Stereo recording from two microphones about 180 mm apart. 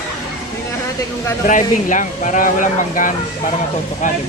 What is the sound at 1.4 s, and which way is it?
Speech, 45° left (ahead or behind).